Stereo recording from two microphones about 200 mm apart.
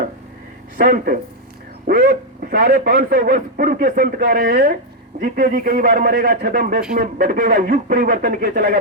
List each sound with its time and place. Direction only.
0.8 s a man's voice: 45° right (ahead or behind)